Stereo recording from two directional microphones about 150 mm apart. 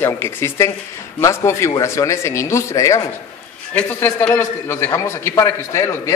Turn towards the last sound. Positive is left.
turn(degrees=20)  # may be behind; listen again after turning